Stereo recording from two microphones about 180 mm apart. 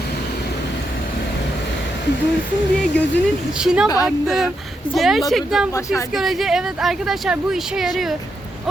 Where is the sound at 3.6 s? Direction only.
5° right (ahead or behind).